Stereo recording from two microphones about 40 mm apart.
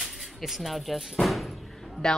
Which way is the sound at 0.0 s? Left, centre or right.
Centre.